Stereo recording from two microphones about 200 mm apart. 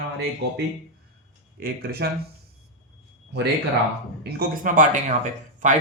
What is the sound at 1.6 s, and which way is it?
Speech, 50° right (ahead or behind).